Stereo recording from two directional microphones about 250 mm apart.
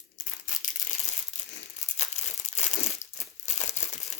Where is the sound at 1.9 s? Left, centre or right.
Left.